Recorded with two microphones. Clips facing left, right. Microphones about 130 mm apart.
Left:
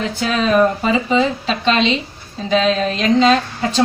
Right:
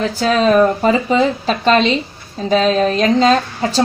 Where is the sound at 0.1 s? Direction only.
40° right (ahead or behind).